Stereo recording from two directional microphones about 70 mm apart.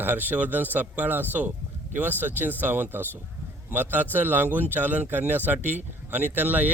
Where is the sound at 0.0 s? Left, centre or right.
Right.